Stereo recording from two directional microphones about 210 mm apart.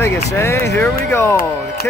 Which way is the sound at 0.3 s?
10° left (ahead or behind).